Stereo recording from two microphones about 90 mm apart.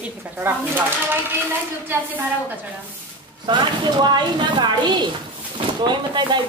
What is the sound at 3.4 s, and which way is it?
Speech, 60° right (ahead or behind).